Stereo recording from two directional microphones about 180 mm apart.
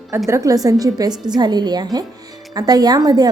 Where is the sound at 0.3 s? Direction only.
15° right (ahead or behind).